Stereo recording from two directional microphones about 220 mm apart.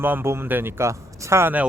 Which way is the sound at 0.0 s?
10° right (ahead or behind).